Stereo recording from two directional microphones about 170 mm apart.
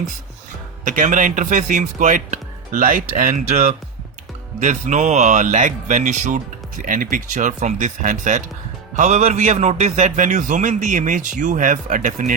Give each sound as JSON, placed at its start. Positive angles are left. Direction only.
{"t": 0.9, "sound": "speech", "side_deg": -50}